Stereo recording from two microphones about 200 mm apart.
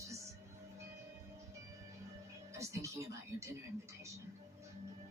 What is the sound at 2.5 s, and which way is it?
Speech, 15° right (ahead or behind).